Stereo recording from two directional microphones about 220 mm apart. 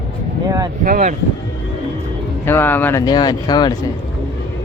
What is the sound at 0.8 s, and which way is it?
Speech, 35° right (ahead or behind).